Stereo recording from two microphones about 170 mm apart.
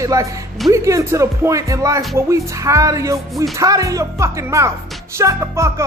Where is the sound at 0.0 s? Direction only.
20° right (ahead or behind).